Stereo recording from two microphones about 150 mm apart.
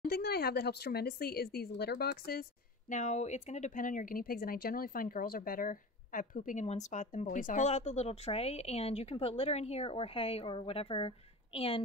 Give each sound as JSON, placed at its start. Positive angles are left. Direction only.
{"t": 0.1, "sound": "speech", "side_deg": 90}
{"t": 2.9, "sound": "speech", "side_deg": 50}